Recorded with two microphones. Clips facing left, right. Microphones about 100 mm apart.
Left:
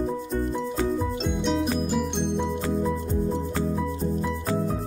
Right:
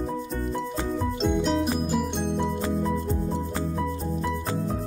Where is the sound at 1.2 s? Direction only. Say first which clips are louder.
Right 4 dB; centre (ahead or behind).